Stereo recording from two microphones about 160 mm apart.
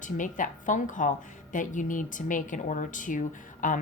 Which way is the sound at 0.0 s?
55° left (ahead or behind).